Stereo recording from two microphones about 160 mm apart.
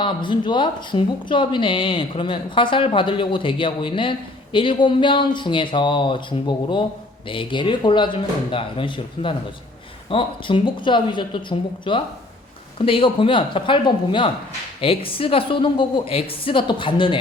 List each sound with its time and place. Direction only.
0.0 s speech: 30° left (ahead or behind)